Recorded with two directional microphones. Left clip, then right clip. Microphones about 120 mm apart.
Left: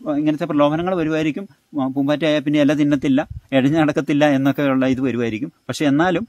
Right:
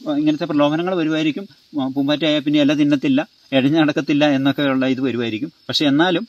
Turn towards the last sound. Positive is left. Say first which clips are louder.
# right 1 dB
turn(degrees=20)  # may be behind; listen again after turning